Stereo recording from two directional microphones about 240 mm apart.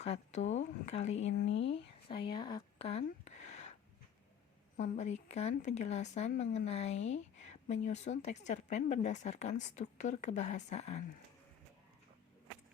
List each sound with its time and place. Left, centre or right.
0.0 s speech: left
1.4 s speech: left
2.0 s a sound: left
4.8 s speech: left